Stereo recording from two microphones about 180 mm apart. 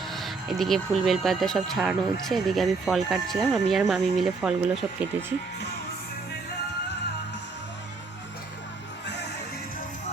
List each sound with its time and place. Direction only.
0.1 s speech: centre (ahead or behind)